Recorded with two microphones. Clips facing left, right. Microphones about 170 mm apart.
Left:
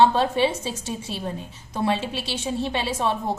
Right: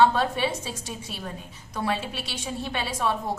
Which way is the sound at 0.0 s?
25° left (ahead or behind).